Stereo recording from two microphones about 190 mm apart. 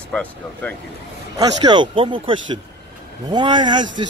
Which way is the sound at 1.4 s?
20° right (ahead or behind).